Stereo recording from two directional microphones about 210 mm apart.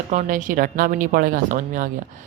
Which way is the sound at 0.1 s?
35° right (ahead or behind).